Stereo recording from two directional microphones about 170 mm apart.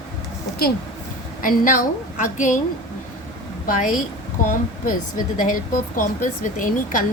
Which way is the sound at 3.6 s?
50° left (ahead or behind).